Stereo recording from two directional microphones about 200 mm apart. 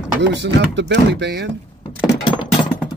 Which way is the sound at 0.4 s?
60° right (ahead or behind).